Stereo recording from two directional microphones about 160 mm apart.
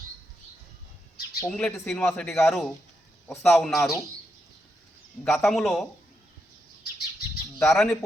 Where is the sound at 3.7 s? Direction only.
20° left (ahead or behind).